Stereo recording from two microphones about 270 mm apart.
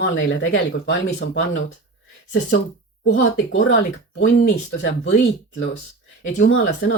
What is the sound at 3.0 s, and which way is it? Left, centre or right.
Speech, left.